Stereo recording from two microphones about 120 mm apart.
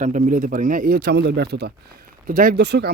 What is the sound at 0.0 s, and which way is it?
Speech, 90° right.